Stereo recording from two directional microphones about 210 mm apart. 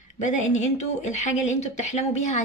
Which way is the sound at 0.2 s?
35° left (ahead or behind).